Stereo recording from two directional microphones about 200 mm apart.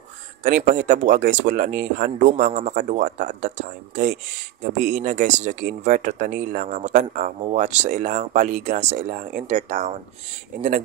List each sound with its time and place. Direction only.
0.4 s speech: 40° right (ahead or behind)